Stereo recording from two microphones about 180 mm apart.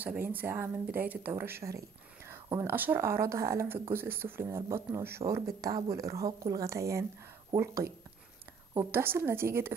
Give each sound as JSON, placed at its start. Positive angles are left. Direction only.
{"t": 0.0, "sound": "speech", "side_deg": -10}